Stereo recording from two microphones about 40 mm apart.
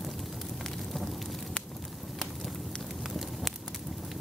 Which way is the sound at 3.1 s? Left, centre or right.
Centre.